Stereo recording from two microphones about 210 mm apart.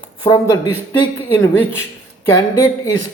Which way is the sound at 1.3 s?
10° left (ahead or behind).